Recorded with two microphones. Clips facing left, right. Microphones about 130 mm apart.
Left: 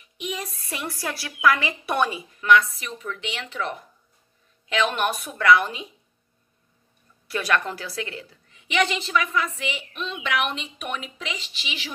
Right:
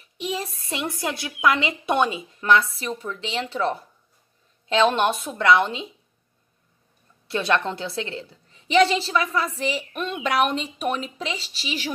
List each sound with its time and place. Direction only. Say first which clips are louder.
0.0 s a woman's voice: right 3 dB; 30° right (ahead or behind)
7.2 s a woman's voice: right 2 dB; 25° right (ahead or behind); by 10.3 s 50° right (ahead or behind)
10.3 s a woman's voice: right 5 dB; 35° right (ahead or behind)